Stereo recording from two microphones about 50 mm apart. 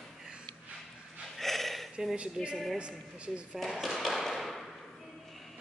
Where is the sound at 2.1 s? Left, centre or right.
Right.